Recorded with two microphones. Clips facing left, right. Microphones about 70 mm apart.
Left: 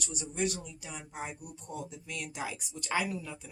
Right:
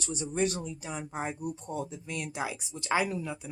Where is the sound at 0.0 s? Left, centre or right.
Right.